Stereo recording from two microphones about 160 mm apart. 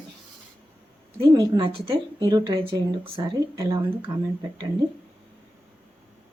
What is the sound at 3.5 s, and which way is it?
Speech, 20° right (ahead or behind).